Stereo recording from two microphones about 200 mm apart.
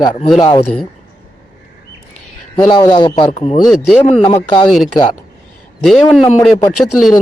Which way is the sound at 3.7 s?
Centre (ahead or behind).